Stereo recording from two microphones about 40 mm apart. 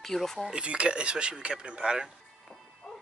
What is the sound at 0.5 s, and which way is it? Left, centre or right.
Speech, right.